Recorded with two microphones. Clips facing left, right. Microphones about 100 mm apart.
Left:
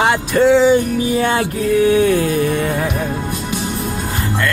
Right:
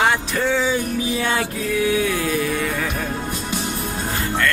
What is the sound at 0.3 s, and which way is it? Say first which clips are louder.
Music: left 9 dB; 30° left (ahead or behind).